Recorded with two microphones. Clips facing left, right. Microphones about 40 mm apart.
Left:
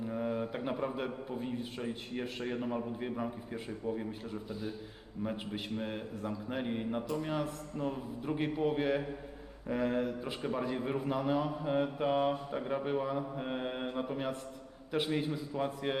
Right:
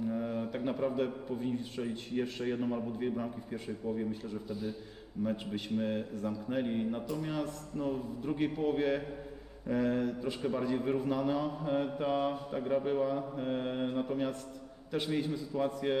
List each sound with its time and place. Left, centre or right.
0.1 s a man's voice: centre
5.7 s a man's voice: centre